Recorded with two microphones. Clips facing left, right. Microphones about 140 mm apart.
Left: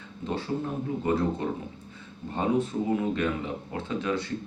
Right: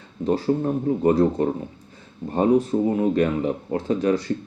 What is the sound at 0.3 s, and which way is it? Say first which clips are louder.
Speech: right 9 dB; 40° right (ahead or behind).